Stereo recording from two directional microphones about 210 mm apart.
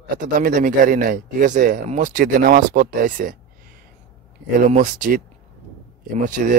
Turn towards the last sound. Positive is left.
turn(degrees=-40)  # may be behind; listen again after turning